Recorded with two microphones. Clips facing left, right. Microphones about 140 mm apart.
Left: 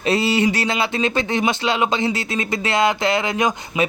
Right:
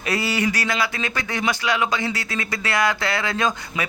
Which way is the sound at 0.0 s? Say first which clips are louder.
Left 5 dB; 25° left (ahead or behind).